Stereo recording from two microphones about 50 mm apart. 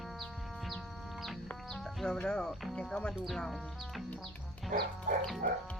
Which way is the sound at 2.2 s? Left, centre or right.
Centre.